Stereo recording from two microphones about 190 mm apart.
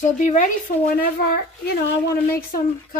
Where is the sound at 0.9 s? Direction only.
55° left (ahead or behind).